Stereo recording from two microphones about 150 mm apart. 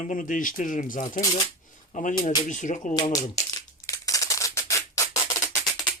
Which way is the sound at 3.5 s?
25° left (ahead or behind).